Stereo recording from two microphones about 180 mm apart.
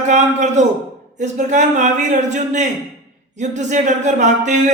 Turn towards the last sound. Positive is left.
turn(degrees=-40)  # may be behind; listen again after turning